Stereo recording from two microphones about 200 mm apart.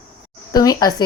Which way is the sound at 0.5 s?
20° left (ahead or behind).